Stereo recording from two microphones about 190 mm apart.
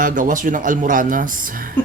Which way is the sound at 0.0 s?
45° right (ahead or behind).